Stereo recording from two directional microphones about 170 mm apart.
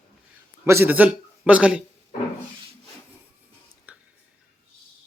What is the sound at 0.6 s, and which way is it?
Speech, 15° right (ahead or behind).